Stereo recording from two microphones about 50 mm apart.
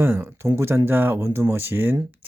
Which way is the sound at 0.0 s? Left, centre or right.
Right.